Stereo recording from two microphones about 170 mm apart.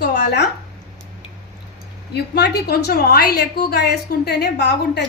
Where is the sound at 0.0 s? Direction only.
85° left.